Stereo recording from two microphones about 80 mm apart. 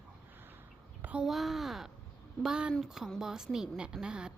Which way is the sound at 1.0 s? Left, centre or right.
Centre.